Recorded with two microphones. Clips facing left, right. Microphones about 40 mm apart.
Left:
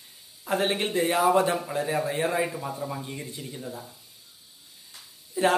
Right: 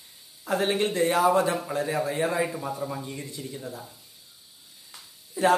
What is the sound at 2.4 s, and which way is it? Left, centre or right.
Speech, centre.